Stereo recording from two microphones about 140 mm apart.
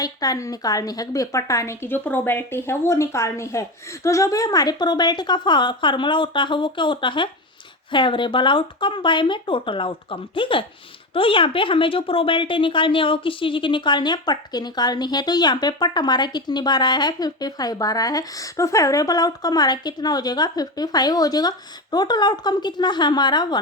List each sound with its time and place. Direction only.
0.0 s a woman's voice: 25° left (ahead or behind)